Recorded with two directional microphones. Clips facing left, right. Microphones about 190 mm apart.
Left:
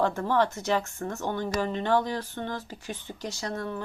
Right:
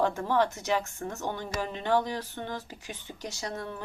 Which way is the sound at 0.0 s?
15° right (ahead or behind).